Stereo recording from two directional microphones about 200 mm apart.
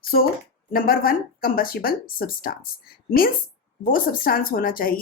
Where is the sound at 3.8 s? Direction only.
45° left (ahead or behind).